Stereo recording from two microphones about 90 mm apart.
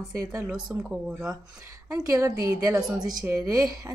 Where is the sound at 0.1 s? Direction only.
35° right (ahead or behind).